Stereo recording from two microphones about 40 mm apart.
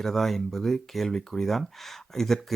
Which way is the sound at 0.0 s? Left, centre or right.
Centre.